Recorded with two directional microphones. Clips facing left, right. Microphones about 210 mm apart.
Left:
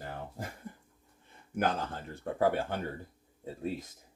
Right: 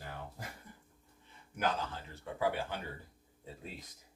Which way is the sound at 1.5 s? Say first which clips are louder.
Left 4 dB; 50° left (ahead or behind).